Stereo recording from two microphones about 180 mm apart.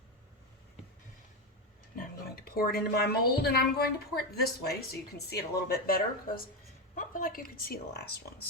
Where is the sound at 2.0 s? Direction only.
60° left (ahead or behind).